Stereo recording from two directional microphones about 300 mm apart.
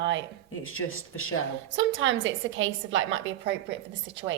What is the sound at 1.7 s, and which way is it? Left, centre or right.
Speech, right.